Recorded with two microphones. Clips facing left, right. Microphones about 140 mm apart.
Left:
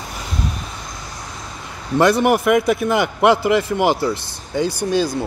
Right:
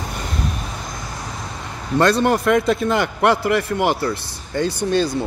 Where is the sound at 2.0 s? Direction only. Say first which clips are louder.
Left 2 dB; 10° left (ahead or behind).